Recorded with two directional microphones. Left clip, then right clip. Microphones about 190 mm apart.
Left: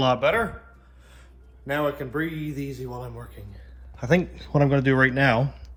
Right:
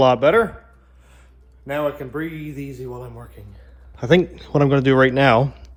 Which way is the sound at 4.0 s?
45° right (ahead or behind).